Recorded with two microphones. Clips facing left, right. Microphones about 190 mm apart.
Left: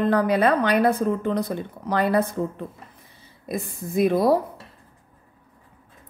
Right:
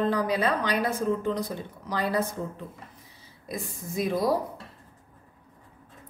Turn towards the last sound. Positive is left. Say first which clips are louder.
# left 7 dB
turn(degrees=60)  # may be behind; listen again after turning